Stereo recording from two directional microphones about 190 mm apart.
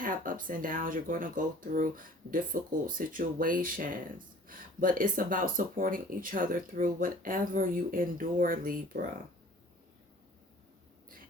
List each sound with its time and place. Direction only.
0.0 s speech: 45° right (ahead or behind)